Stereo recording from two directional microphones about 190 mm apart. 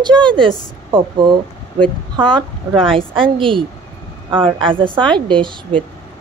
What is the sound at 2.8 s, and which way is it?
A woman's voice, 30° right (ahead or behind).